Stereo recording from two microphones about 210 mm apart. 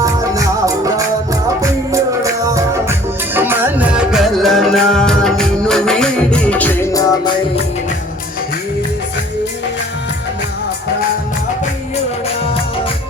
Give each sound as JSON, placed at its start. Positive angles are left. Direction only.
{"t": 0.0, "sound": "music", "side_deg": -15}